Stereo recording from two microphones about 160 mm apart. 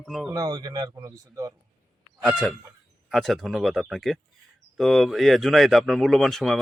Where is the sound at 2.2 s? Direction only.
Centre (ahead or behind).